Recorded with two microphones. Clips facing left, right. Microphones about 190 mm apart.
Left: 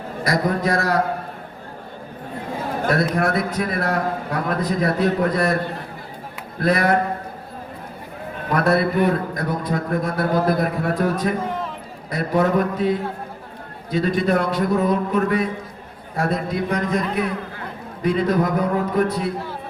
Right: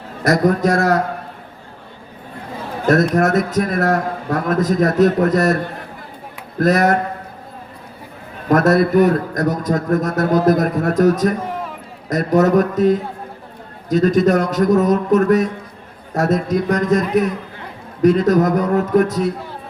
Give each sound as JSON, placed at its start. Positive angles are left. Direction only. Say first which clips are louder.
{"t": 0.3, "sound": "a man's voice", "louder": "right 6 dB", "side_deg": -45}
{"t": 2.8, "sound": "a man's voice", "louder": "right 6 dB", "side_deg": -45}
{"t": 6.6, "sound": "a man's voice", "louder": "right 4 dB", "side_deg": -45}
{"t": 8.4, "sound": "a man's voice", "louder": "right 5 dB", "side_deg": -45}